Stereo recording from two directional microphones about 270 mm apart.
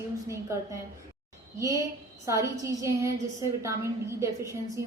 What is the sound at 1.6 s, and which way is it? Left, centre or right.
A woman's voice, centre.